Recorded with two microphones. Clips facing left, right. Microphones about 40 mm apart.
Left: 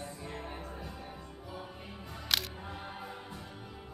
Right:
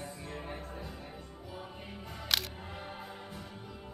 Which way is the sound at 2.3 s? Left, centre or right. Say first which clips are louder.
Even; centre.